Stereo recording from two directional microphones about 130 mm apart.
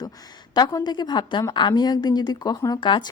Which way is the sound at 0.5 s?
30° left (ahead or behind).